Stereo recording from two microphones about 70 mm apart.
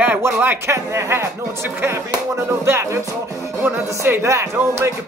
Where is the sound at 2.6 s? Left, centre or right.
Right.